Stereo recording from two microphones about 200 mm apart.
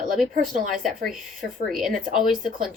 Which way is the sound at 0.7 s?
Centre (ahead or behind).